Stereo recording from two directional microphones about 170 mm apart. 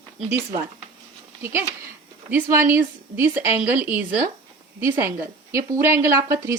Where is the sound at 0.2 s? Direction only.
10° right (ahead or behind).